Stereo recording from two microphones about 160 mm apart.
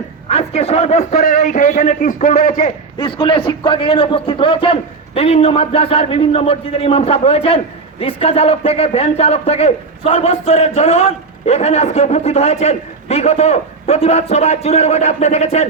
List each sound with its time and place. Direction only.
0.3 s a man's voice: 40° left (ahead or behind)
3.0 s a man's voice: 30° left (ahead or behind)